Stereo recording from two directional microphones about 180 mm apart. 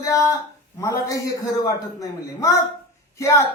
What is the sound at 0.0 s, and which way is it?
A man's voice, 20° left (ahead or behind).